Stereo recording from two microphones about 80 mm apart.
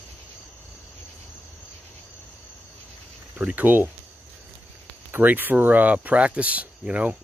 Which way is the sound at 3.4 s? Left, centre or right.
Centre.